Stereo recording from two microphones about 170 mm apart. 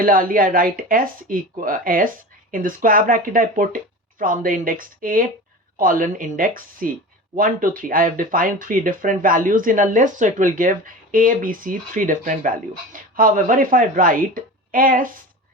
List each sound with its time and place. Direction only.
0.0 s speech: 55° right (ahead or behind)